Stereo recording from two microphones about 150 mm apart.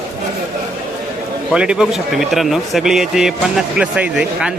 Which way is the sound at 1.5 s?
5° right (ahead or behind).